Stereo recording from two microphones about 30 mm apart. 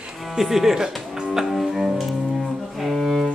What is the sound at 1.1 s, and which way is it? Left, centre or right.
Music, right.